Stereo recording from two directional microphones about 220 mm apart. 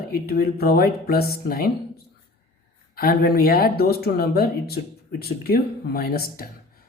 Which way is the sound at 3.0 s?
45° left (ahead or behind).